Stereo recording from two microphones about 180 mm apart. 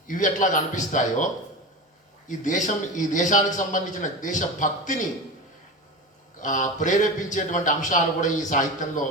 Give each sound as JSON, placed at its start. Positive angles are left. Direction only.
{"t": 0.1, "sound": "a man's voice", "side_deg": 45}
{"t": 6.4, "sound": "a man's voice", "side_deg": 45}